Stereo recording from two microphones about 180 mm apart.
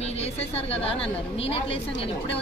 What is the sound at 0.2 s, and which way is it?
A woman's voice, 35° left (ahead or behind).